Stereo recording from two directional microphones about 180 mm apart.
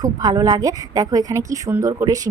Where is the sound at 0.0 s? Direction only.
20° right (ahead or behind).